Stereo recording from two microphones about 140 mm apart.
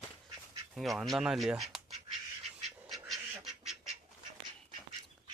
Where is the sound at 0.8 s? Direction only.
Centre (ahead or behind).